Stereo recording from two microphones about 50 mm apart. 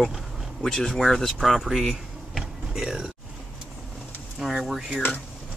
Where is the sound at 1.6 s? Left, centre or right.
Centre.